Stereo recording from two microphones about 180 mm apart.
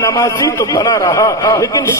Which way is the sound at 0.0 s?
15° left (ahead or behind).